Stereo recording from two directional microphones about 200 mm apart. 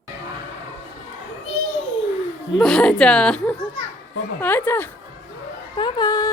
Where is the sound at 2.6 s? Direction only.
5° left (ahead or behind).